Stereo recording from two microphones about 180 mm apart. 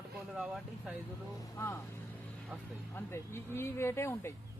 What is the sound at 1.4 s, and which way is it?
Speech, 15° left (ahead or behind).